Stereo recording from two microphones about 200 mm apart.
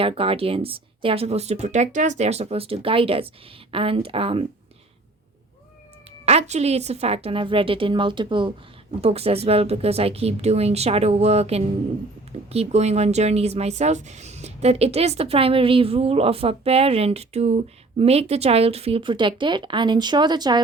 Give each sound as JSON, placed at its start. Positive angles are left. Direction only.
{"t": 0.0, "sound": "speech", "side_deg": -30}
{"t": 6.1, "sound": "speech", "side_deg": -30}